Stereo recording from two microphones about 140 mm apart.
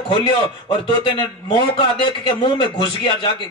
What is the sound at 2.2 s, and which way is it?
A man's voice, 35° left (ahead or behind).